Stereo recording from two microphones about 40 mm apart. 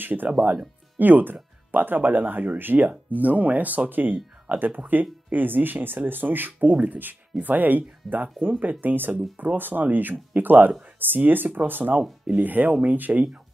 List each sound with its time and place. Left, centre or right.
0.0 s speech: right
0.3 s speech: right
0.9 s speech: right
2.9 s speech: right
12.3 s speech: right